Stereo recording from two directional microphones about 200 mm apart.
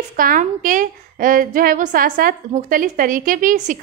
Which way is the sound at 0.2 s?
45° right (ahead or behind).